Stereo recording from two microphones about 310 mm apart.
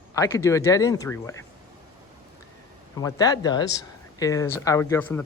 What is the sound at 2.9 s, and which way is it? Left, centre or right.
Speech, centre.